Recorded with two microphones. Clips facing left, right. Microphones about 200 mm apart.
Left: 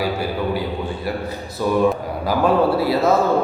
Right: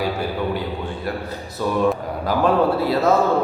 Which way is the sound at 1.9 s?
5° left (ahead or behind).